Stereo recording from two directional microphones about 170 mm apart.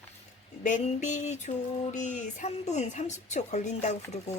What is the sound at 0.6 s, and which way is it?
A woman's voice, 45° left (ahead or behind).